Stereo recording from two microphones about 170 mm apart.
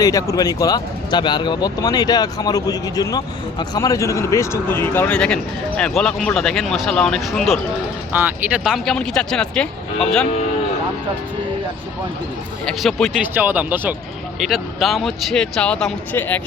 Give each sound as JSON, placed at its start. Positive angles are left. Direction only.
{"t": 0.0, "sound": "speech", "side_deg": 20}
{"t": 12.6, "sound": "speech", "side_deg": 0}
{"t": 13.2, "sound": "speech", "side_deg": -10}